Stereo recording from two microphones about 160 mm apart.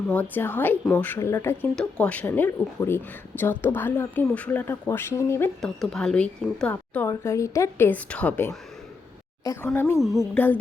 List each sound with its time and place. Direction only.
0.1 s speech: 10° left (ahead or behind)
5.6 s speech: 5° left (ahead or behind)